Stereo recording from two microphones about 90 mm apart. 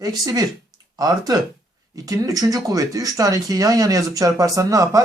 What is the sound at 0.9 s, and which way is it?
Speech, 45° right (ahead or behind).